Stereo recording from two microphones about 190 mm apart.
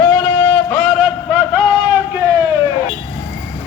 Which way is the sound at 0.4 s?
5° left (ahead or behind).